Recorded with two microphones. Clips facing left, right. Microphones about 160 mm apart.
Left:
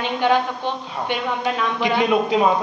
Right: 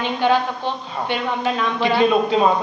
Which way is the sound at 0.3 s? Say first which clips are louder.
Even; 15° left (ahead or behind).